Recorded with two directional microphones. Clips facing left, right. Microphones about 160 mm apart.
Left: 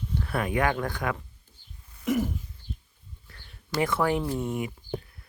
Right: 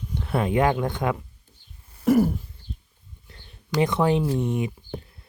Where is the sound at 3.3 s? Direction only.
20° right (ahead or behind).